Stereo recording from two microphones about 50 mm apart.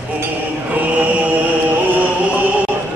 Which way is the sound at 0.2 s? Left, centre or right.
Right.